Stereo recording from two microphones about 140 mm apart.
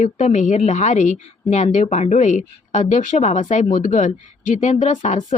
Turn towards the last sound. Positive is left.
turn(degrees=60)  # may be behind; listen again after turning